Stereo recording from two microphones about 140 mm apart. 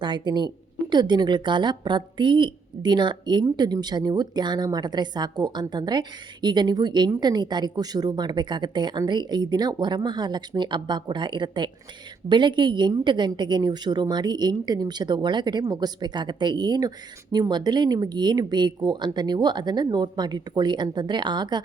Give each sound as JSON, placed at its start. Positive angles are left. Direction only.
{"t": 0.0, "sound": "a woman's voice", "side_deg": -35}